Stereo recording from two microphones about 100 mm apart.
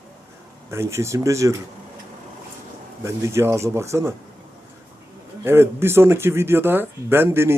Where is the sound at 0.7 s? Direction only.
25° right (ahead or behind).